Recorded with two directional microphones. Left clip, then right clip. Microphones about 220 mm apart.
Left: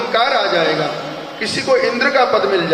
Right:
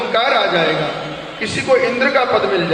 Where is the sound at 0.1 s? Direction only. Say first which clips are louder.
Even; 55° left (ahead or behind).